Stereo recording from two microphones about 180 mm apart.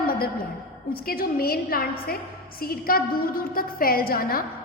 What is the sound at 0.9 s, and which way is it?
A woman's voice, 55° left (ahead or behind).